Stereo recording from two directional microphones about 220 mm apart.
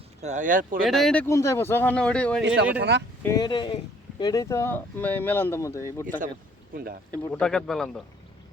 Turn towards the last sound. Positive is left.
turn(degrees=0)  # may be behind; listen again after turning